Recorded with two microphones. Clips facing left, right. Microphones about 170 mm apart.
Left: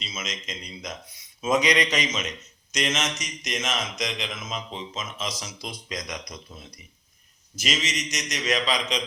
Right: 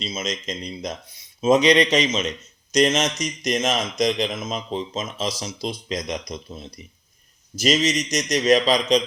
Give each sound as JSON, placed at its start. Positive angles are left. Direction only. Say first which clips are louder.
{"t": 0.0, "sound": "a man's voice", "louder": "right 8 dB", "side_deg": -35}
{"t": 7.5, "sound": "speech", "louder": "right 9 dB", "side_deg": -35}